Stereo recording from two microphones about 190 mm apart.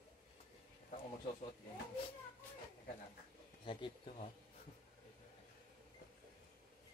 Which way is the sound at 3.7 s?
30° left (ahead or behind).